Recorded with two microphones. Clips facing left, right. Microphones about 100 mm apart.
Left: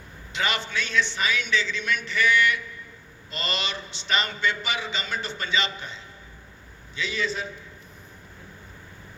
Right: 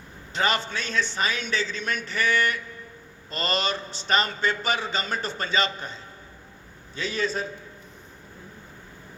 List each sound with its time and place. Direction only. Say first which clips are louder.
0.3 s a man's voice: right 2 dB; 40° right (ahead or behind)